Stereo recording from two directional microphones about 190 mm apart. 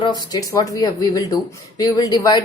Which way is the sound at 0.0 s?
25° left (ahead or behind).